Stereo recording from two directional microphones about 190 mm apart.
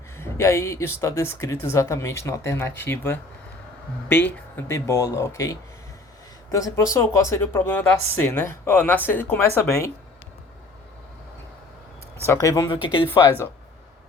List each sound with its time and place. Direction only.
0.2 s speech: 15° left (ahead or behind)
12.2 s speech: 15° left (ahead or behind)